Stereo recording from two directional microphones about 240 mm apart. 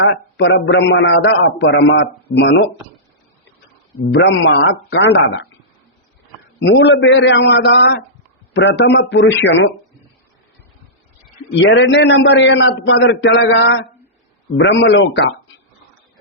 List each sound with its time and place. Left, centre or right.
0.0 s a man's voice: left
4.1 s a man's voice: left
6.6 s a man's voice: left
11.6 s a man's voice: left